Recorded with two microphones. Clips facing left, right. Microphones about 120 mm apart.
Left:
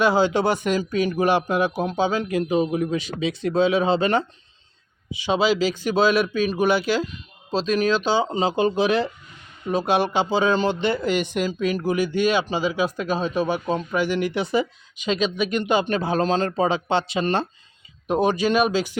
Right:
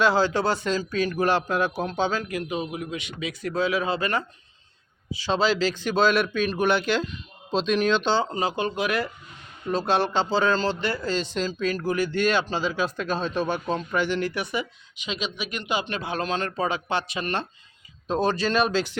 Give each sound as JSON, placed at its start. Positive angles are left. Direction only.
{"t": 0.0, "sound": "a man's voice", "side_deg": 15}
{"t": 2.2, "sound": "a man's voice", "side_deg": 30}
{"t": 5.1, "sound": "a man's voice", "side_deg": 15}
{"t": 9.6, "sound": "a man's voice", "side_deg": 15}
{"t": 14.3, "sound": "speech", "side_deg": 30}
{"t": 18.1, "sound": "a man's voice", "side_deg": 15}